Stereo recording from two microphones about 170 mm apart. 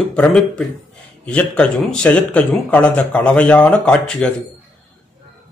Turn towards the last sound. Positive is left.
turn(degrees=5)  # may be behind; listen again after turning